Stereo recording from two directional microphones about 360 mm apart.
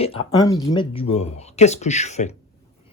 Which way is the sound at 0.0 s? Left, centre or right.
Centre.